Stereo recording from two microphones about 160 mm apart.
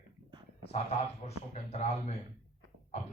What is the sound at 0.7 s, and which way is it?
Speech, 40° left (ahead or behind).